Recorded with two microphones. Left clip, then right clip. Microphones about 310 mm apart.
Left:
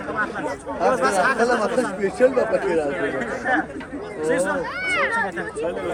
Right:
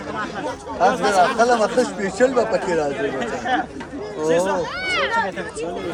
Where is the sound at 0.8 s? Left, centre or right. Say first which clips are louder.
Right 3 dB; right.